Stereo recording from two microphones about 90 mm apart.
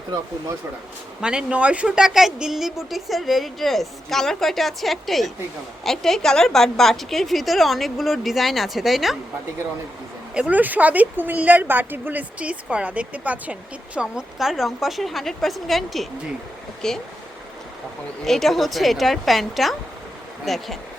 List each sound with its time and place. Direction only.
1.2 s a woman's voice: 10° right (ahead or behind)
10.3 s speech: 15° right (ahead or behind); by 17.0 s 5° left (ahead or behind)
18.3 s a woman's voice: centre (ahead or behind)